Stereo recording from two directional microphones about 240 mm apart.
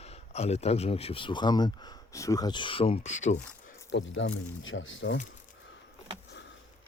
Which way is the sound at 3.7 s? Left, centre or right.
Left.